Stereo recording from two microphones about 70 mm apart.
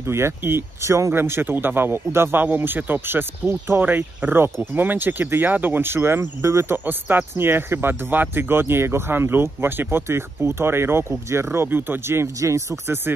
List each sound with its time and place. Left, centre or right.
0.0 s speech: right